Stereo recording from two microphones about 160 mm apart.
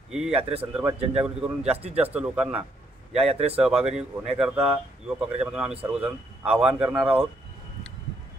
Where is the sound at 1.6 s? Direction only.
40° right (ahead or behind).